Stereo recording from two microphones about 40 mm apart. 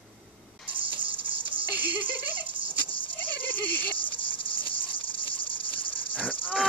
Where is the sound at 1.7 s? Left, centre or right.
Right.